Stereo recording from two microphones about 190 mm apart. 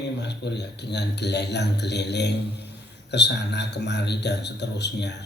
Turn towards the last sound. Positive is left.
turn(degrees=65)  # may be behind; listen again after turning